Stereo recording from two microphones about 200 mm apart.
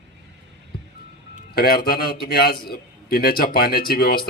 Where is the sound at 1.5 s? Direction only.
50° left (ahead or behind).